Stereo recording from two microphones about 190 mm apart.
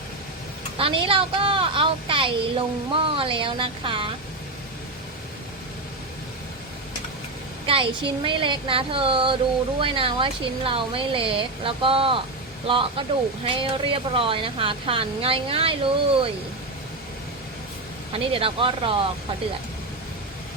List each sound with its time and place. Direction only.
0.8 s a woman's voice: 30° right (ahead or behind)
7.7 s a woman's voice: 25° right (ahead or behind)
18.1 s a woman's voice: 30° right (ahead or behind)